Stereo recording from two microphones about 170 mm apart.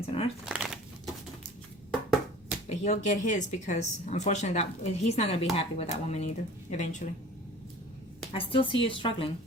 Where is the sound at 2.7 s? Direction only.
45° left (ahead or behind).